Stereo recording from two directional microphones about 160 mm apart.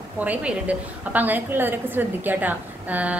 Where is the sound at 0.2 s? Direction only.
10° right (ahead or behind).